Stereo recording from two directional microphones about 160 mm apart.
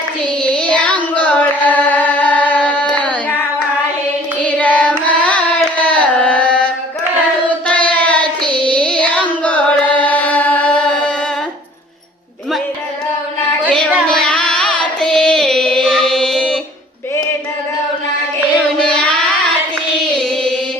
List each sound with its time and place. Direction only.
0.4 s child singing: 10° left (ahead or behind)
1.1 s carnatic music: 10° left (ahead or behind)
4.4 s carnatic music: 10° left (ahead or behind)
7.4 s child singing: 10° left (ahead or behind)
8.4 s child singing: 30° right (ahead or behind)
8.7 s carnatic music: 10° left (ahead or behind)
13.7 s a sound: 5° left (ahead or behind)
14.2 s carnatic music: 5° left (ahead or behind)
18.8 s child singing: 5° left (ahead or behind)